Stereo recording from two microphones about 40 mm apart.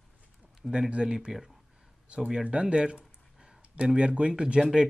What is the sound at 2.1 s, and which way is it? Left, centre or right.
Speech, right.